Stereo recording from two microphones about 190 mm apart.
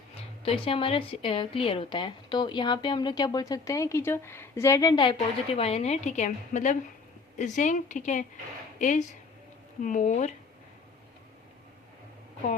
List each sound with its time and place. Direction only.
0.4 s a woman's voice: 30° left (ahead or behind)